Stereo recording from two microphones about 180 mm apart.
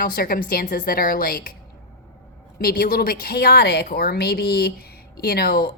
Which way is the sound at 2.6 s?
55° left (ahead or behind).